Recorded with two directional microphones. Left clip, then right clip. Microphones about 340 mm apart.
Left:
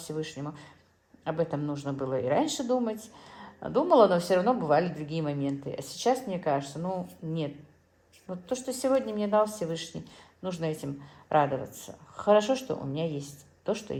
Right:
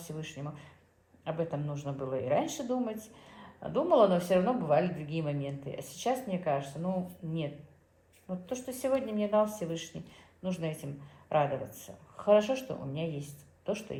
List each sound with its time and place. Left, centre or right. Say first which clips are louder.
1.2 s speech: left 5 dB; left
8.4 s speech: left 4 dB; left